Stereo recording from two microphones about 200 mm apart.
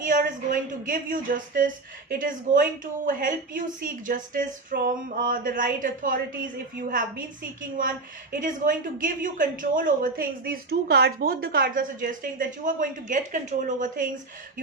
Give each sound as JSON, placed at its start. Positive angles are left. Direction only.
{"t": 0.0, "sound": "a woman's voice", "side_deg": -45}
{"t": 7.8, "sound": "a woman's voice", "side_deg": -40}